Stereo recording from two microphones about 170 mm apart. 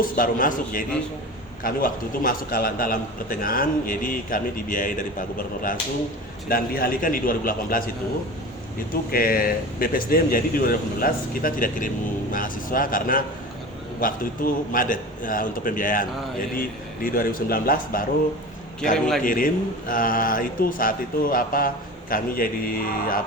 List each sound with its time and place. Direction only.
0.0 s a man's voice: 55° left (ahead or behind)
6.5 s a man's voice: 60° left (ahead or behind)
9.1 s a man's voice: 60° left (ahead or behind)
18.9 s a man's voice: 5° left (ahead or behind)
19.2 s a man's voice: 55° left (ahead or behind)